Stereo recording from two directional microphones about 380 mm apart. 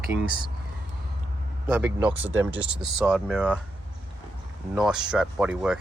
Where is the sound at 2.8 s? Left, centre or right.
Centre.